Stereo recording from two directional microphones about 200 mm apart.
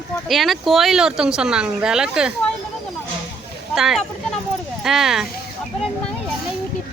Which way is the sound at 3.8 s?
Centre (ahead or behind).